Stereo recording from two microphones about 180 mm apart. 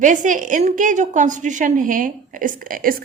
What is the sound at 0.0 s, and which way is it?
A woman's voice, 45° right (ahead or behind).